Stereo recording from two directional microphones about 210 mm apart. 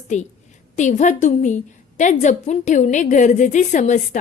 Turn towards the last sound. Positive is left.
turn(degrees=35)  # may be behind; listen again after turning